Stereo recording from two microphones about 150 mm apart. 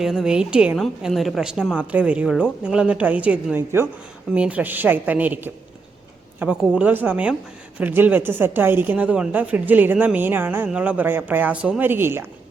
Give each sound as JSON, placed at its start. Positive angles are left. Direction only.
{"t": 0.0, "sound": "a woman's voice", "side_deg": -5}